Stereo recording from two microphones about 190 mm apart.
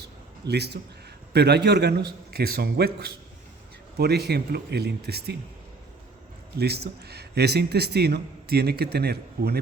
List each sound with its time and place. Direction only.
0.4 s a man's voice: 60° right (ahead or behind)
6.6 s a man's voice: 60° right (ahead or behind)